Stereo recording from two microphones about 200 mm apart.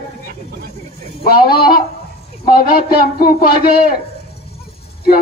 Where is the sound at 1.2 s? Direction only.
50° left (ahead or behind).